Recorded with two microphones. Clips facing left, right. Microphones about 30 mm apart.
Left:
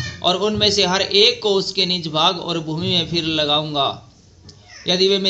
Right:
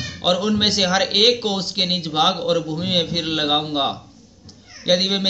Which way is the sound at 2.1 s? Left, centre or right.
Centre.